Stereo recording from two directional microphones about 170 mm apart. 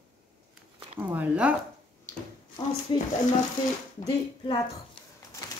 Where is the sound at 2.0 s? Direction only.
20° left (ahead or behind).